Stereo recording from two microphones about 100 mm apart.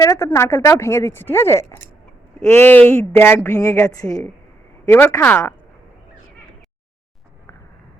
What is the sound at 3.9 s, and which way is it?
Speech, 35° left (ahead or behind).